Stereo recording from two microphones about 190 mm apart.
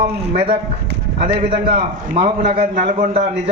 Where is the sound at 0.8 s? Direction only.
60° right (ahead or behind).